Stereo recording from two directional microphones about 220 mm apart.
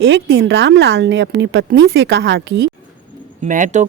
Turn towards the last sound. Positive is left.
turn(degrees=-35)  # may be behind; listen again after turning